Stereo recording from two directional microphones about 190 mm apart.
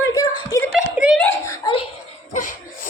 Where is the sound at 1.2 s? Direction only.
15° left (ahead or behind).